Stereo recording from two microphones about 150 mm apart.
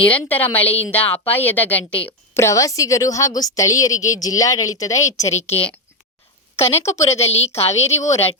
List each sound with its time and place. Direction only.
0.0 s a woman's voice: 10° left (ahead or behind)
5.3 s speech: 45° left (ahead or behind)
6.8 s a woman's voice: 20° left (ahead or behind)
7.1 s speech: 45° left (ahead or behind)